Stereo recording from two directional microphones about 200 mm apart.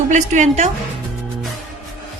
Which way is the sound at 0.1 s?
35° right (ahead or behind).